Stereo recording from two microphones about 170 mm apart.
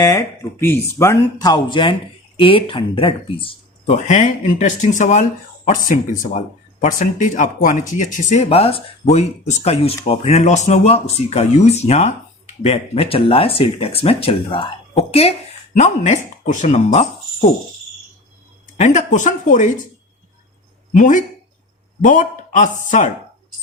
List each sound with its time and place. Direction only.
0.0 s speech: 20° left (ahead or behind); by 15.4 s 35° left (ahead or behind)
15.8 s speech: 45° left (ahead or behind)
18.8 s speech: 45° left (ahead or behind)
20.9 s speech: 50° left (ahead or behind)